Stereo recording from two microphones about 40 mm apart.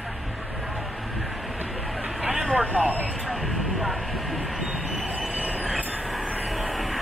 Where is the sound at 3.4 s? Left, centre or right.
Centre.